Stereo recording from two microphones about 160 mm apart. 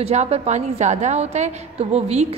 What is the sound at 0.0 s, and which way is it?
A woman's voice, 40° right (ahead or behind).